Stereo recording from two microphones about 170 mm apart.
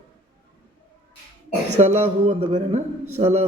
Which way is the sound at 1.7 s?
40° right (ahead or behind).